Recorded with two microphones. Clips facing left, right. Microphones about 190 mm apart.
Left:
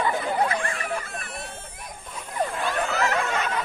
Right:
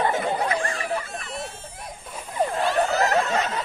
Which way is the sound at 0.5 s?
35° right (ahead or behind).